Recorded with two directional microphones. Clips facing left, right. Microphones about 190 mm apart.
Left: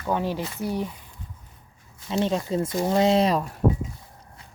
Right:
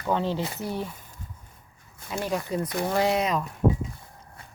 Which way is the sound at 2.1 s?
25° left (ahead or behind).